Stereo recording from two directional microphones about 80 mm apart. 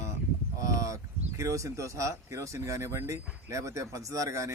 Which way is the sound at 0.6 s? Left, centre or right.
Right.